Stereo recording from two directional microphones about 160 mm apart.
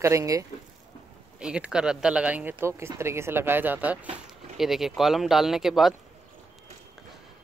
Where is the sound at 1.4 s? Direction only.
5° right (ahead or behind).